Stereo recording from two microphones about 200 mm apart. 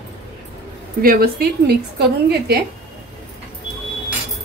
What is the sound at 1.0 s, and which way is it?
A woman's voice, 50° right (ahead or behind).